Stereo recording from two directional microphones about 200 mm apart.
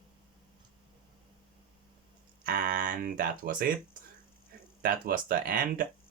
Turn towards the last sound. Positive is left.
turn(degrees=-45)  # may be behind; listen again after turning